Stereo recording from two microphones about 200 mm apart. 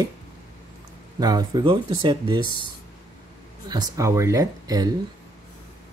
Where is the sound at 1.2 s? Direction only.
20° right (ahead or behind).